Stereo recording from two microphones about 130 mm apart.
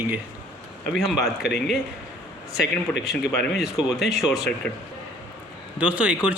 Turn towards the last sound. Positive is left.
turn(degrees=-10)  # may be behind; listen again after turning